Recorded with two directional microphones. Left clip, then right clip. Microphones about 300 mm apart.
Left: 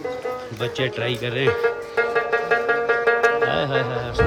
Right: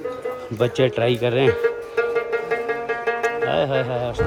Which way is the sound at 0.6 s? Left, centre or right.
Centre.